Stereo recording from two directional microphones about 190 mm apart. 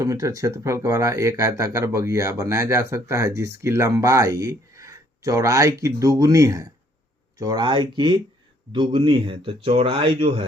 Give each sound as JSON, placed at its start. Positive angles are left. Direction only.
{"t": 0.0, "sound": "speech", "side_deg": -15}